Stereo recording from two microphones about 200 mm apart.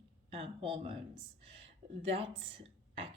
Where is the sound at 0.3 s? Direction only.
30° right (ahead or behind).